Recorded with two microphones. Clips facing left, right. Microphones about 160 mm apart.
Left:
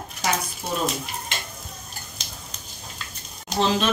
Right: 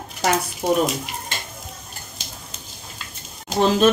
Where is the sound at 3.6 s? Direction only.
50° right (ahead or behind).